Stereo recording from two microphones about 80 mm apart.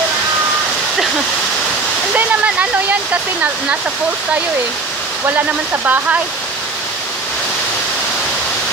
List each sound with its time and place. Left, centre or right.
2.1 s waterfall: centre
5.2 s speech: right